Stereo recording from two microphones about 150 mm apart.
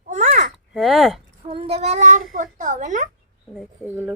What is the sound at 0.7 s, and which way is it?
Speech, centre (ahead or behind).